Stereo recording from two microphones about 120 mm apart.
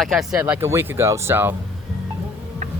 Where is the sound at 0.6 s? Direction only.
20° right (ahead or behind).